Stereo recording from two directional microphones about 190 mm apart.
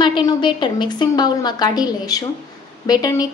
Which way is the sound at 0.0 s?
25° left (ahead or behind).